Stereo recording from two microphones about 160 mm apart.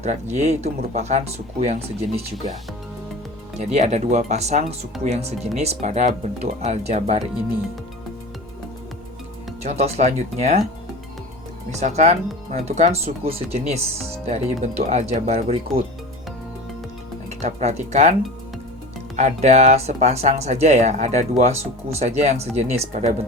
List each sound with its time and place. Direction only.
0.0 s speech: 45° right (ahead or behind)
3.5 s speech: 45° right (ahead or behind)
9.6 s speech: 40° right (ahead or behind)
11.8 s speech: 45° right (ahead or behind)
17.2 s speech: 45° right (ahead or behind)
19.1 s speech: 45° right (ahead or behind)